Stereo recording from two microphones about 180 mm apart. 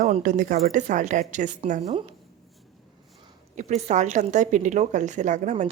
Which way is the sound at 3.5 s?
40° right (ahead or behind).